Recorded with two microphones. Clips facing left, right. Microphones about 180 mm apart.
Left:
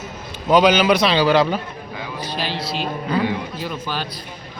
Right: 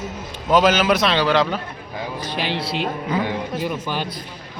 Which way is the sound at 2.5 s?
65° right (ahead or behind).